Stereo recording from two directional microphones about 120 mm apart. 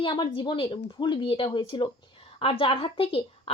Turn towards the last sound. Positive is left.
turn(degrees=50)  # may be behind; listen again after turning